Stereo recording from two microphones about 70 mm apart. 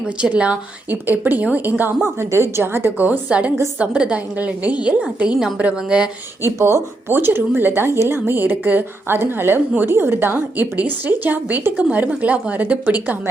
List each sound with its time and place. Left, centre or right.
0.2 s a woman's voice: centre
2.3 s speech: right
3.0 s a woman's voice: centre
6.4 s a woman's voice: right